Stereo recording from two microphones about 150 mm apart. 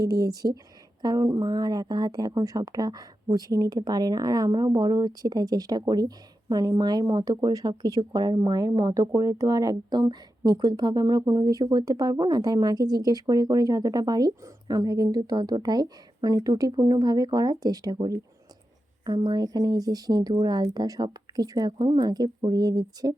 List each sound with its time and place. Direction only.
0.0 s speech: 25° right (ahead or behind)